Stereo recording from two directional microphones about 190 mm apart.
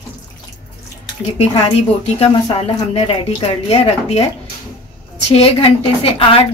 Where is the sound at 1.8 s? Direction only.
30° left (ahead or behind).